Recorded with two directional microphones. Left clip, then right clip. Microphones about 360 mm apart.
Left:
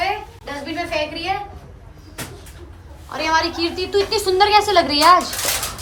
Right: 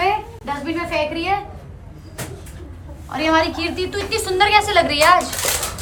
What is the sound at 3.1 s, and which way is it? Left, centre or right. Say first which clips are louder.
A woman's voice: right 1 dB; centre.